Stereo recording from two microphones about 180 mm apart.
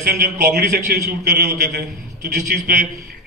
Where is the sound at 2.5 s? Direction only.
45° right (ahead or behind).